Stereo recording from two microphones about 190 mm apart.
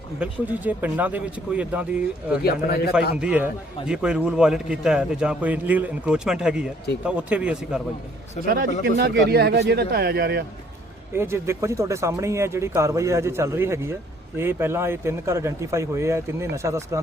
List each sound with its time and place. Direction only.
0.2 s speech: 10° right (ahead or behind)
2.4 s a man's voice: 55° left (ahead or behind)
3.2 s a man's voice: 5° right (ahead or behind)
8.4 s speech: 50° right (ahead or behind)
11.1 s speech: 15° right (ahead or behind)